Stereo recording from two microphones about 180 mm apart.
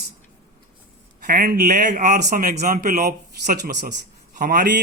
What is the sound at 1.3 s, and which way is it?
Speech, 55° right (ahead or behind).